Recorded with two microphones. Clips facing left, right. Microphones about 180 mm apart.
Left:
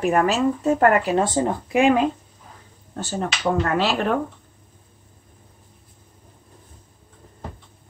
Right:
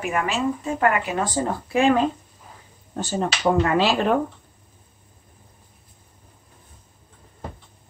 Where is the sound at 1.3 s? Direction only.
20° left (ahead or behind).